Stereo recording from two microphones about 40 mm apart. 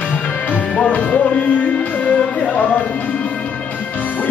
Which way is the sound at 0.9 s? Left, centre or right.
Left.